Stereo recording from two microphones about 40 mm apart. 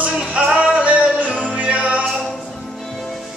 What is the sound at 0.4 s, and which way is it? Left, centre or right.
Music, right.